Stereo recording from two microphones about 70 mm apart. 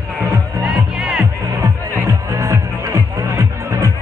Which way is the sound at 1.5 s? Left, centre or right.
Right.